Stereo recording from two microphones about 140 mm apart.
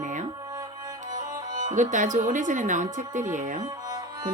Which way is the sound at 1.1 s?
30° right (ahead or behind).